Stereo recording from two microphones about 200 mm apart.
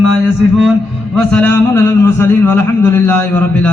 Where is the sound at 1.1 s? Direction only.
5° left (ahead or behind).